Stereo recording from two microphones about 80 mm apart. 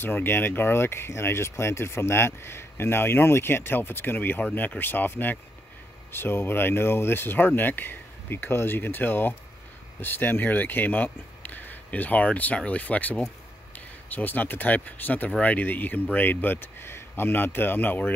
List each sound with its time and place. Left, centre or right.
0.0 s speech: left